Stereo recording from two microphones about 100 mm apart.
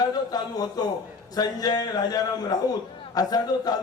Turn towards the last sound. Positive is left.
turn(degrees=40)  # may be behind; listen again after turning